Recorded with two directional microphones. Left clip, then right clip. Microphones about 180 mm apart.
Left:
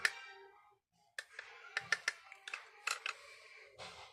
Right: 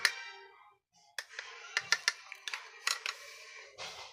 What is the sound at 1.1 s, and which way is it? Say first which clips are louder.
Music: right 5 dB; 15° right (ahead or behind).